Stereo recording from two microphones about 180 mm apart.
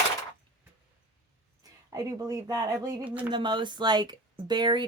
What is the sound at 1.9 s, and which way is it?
Speech, 20° right (ahead or behind).